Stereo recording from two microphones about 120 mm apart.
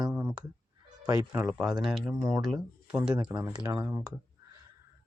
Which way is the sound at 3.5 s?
35° right (ahead or behind).